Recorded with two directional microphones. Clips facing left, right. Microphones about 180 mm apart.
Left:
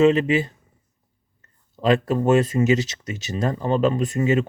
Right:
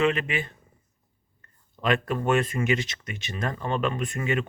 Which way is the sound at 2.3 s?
20° left (ahead or behind).